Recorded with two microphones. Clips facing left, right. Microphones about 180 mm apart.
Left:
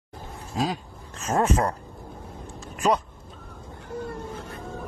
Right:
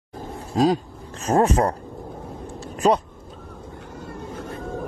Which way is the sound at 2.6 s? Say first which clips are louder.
Right 4 dB; 35° right (ahead or behind).